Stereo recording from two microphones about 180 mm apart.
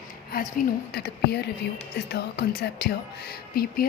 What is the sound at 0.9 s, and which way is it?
Speech, 65° left (ahead or behind).